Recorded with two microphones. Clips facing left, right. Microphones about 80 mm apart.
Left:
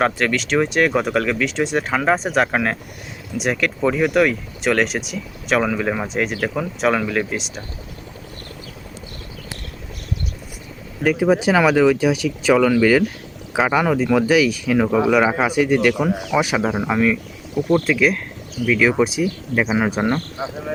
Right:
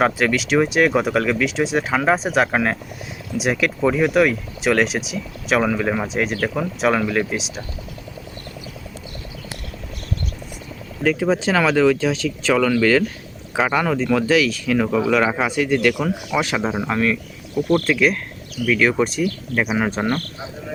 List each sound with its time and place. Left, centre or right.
0.0 s speech: centre
11.0 s speech: centre